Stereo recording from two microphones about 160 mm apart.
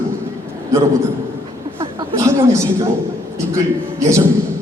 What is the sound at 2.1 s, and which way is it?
Speech, 20° right (ahead or behind).